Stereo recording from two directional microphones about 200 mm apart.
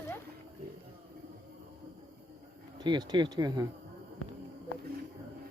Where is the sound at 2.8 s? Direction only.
20° right (ahead or behind).